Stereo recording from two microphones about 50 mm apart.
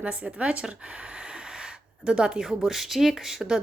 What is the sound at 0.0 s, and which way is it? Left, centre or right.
Speech, right.